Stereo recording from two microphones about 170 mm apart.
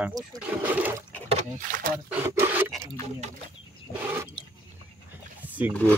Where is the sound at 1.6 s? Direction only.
55° right (ahead or behind).